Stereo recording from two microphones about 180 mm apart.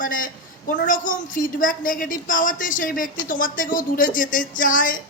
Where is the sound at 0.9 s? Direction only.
45° left (ahead or behind).